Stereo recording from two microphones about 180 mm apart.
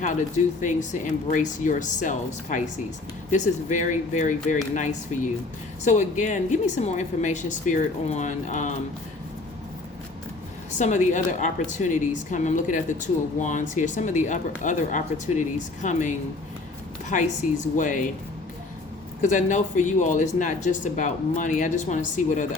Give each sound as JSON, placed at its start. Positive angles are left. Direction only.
{"t": 0.6, "sound": "a woman's voice", "side_deg": 45}
{"t": 10.8, "sound": "a woman's voice", "side_deg": 45}
{"t": 19.2, "sound": "a woman's voice", "side_deg": 45}